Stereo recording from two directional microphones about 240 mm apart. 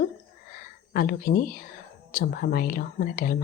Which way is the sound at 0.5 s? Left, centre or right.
Left.